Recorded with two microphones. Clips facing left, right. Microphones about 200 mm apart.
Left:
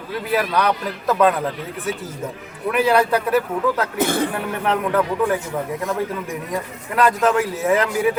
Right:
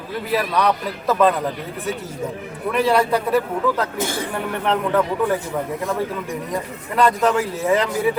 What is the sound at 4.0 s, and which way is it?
Speech, 60° left (ahead or behind).